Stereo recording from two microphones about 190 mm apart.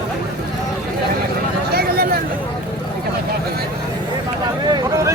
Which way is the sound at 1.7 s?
50° right (ahead or behind).